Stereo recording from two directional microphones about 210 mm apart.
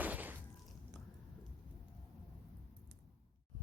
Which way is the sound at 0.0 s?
10° right (ahead or behind).